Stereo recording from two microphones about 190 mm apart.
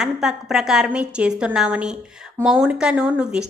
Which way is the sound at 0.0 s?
Centre (ahead or behind).